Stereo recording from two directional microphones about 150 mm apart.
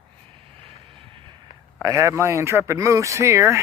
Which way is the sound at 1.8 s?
20° right (ahead or behind).